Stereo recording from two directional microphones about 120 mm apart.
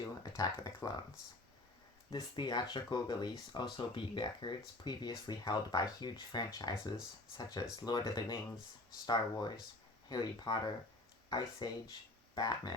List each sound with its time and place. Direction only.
0.0 s speech: 30° left (ahead or behind)
2.0 s speech: 35° left (ahead or behind)